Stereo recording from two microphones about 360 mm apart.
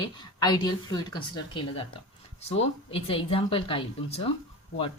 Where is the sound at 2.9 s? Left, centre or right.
Centre.